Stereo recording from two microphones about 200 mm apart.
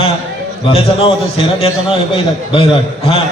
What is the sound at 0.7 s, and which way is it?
A man's voice, 30° left (ahead or behind).